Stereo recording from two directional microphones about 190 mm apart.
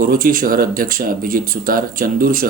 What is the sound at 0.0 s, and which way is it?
Speech, 50° right (ahead or behind).